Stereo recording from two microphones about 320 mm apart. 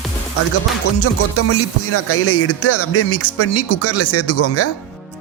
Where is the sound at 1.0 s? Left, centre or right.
Left.